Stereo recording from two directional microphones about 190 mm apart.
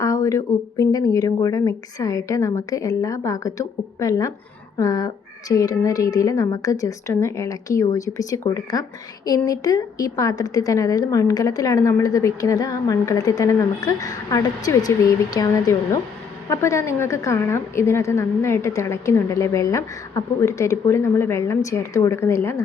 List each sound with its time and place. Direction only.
0.0 s a woman's voice: 15° left (ahead or behind)